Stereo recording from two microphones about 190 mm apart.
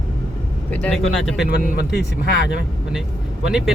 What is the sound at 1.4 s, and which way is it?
Speech, 55° left (ahead or behind).